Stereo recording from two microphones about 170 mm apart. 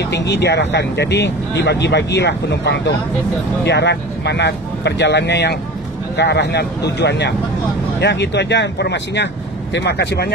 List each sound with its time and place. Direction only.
0.0 s speech: 90° left; by 10.3 s 70° left (ahead or behind)